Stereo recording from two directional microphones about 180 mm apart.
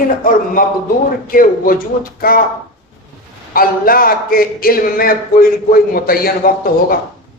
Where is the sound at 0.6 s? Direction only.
50° left (ahead or behind).